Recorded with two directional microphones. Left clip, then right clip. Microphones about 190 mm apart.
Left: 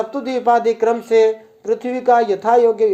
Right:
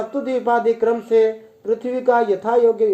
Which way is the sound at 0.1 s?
25° left (ahead or behind).